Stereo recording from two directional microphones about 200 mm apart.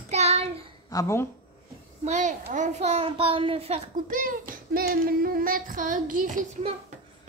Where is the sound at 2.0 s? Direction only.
35° right (ahead or behind).